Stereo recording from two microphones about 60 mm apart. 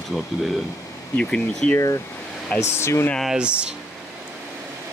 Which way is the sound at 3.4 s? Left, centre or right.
Centre.